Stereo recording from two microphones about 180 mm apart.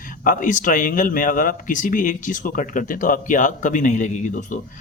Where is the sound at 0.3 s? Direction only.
45° left (ahead or behind).